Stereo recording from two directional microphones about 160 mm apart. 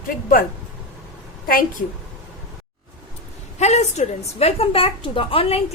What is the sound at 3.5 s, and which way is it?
A woman's voice, 45° left (ahead or behind).